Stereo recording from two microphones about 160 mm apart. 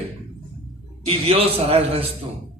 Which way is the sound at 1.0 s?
35° right (ahead or behind).